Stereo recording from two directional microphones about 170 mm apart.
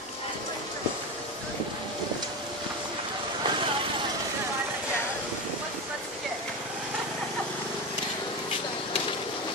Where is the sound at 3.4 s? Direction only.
30° right (ahead or behind).